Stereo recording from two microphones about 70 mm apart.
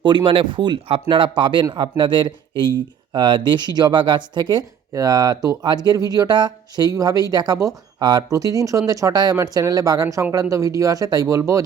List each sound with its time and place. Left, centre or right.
0.0 s speech: right
4.9 s speech: right
6.9 s speech: right
7.9 s speech: right
8.3 s speech: right